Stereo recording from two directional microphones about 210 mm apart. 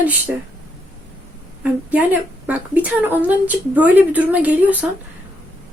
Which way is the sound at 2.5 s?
10° right (ahead or behind).